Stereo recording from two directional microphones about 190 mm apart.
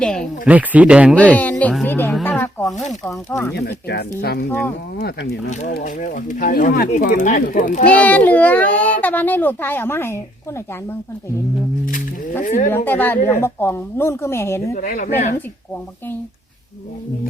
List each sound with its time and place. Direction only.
0.0 s speech: 5° left (ahead or behind)
0.4 s speech: 10° right (ahead or behind)
1.1 s a child's voice: 5° left (ahead or behind)
3.8 s speech: 60° left (ahead or behind)
4.4 s a child's voice: 10° left (ahead or behind)
4.9 s speech: 60° left (ahead or behind)
5.5 s speech: 40° left (ahead or behind); by 6.9 s 55° left (ahead or behind)
6.9 s speech: 45° left (ahead or behind)
7.9 s a child's voice: 10° left (ahead or behind)
12.4 s speech: 45° left (ahead or behind)
12.7 s a child's voice: 10° left (ahead or behind)
14.8 s speech: 45° left (ahead or behind)